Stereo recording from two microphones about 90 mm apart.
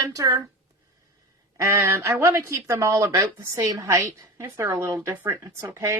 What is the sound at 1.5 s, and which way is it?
A woman's voice, 35° right (ahead or behind).